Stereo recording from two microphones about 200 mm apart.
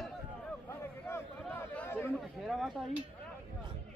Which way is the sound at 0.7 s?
10° left (ahead or behind).